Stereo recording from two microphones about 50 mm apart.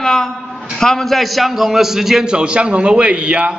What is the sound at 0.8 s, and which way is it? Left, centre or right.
A man's voice, centre.